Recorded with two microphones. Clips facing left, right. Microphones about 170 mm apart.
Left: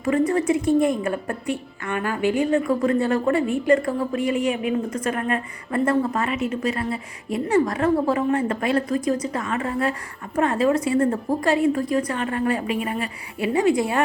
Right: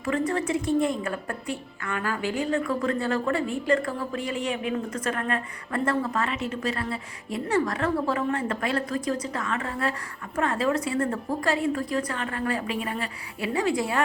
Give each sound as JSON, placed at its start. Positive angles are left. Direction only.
{"t": 0.0, "sound": "a woman's voice", "side_deg": 20}